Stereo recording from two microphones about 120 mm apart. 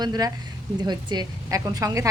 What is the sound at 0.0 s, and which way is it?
A woman's voice, 35° right (ahead or behind).